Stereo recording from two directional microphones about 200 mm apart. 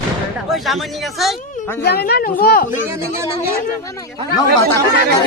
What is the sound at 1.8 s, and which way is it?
Speech, 50° left (ahead or behind).